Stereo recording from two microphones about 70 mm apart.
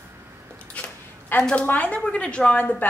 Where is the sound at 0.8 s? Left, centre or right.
Left.